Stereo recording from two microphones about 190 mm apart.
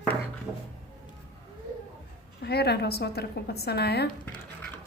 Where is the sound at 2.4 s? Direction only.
60° left (ahead or behind).